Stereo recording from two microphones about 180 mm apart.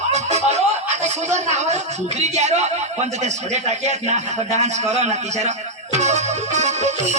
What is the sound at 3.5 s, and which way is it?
Music, 40° right (ahead or behind).